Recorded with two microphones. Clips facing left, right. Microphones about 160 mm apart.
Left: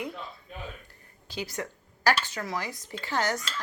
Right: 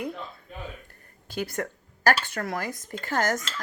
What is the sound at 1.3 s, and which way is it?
Speech, 50° right (ahead or behind).